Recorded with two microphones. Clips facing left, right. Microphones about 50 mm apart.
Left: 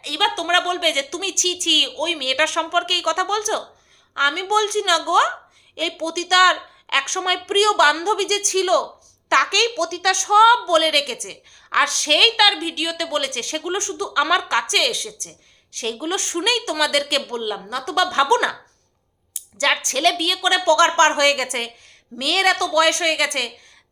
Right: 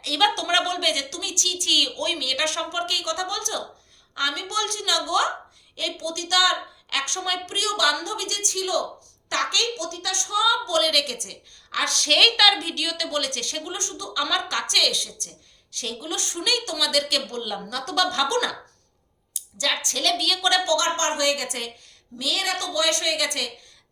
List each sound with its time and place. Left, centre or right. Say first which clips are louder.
0.0 s a woman's voice: left 1 dB; centre; by 1.5 s left
1.5 s a woman's voice: left 2 dB; left
4.8 s a woman's voice: left 3 dB; left
12.2 s a woman's voice: left 2 dB; centre; by 18.5 s left
19.5 s a woman's voice: left 6 dB; left
20.7 s a woman's voice: left 8 dB; left
22.2 s a woman's voice: left 8 dB; left